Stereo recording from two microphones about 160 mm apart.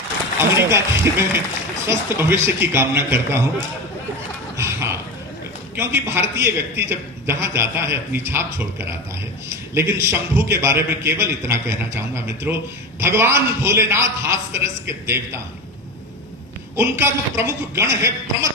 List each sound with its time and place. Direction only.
0.3 s a man's voice: 15° right (ahead or behind)
4.5 s a sound: 15° right (ahead or behind)
5.7 s a man's voice: 15° right (ahead or behind)
16.7 s a man's voice: 15° right (ahead or behind)